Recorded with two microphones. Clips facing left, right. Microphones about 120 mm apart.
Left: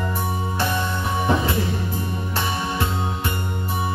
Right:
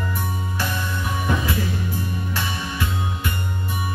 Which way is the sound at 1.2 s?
30° left (ahead or behind).